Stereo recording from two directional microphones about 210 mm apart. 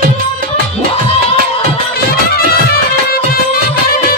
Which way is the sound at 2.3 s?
50° left (ahead or behind).